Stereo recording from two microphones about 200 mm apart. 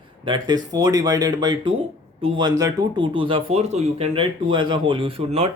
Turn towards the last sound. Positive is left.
turn(degrees=-30)  # may be behind; listen again after turning